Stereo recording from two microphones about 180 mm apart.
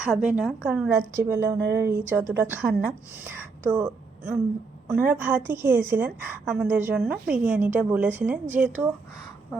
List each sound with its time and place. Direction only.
0.0 s a woman's voice: 5° right (ahead or behind)